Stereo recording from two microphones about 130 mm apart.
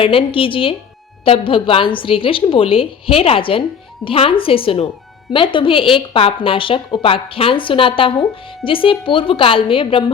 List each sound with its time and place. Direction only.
0.0 s a woman's voice: 45° left (ahead or behind)